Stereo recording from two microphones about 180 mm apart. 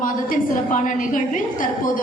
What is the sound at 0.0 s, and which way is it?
A woman's voice, 45° left (ahead or behind).